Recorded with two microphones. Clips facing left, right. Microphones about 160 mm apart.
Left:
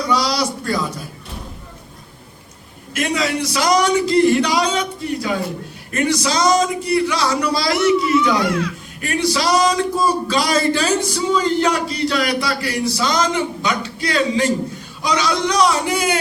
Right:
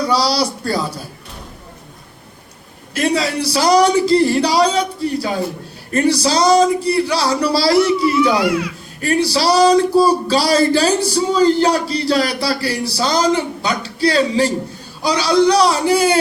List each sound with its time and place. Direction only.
0.1 s speech: 35° right (ahead or behind)
2.9 s speech: 35° right (ahead or behind)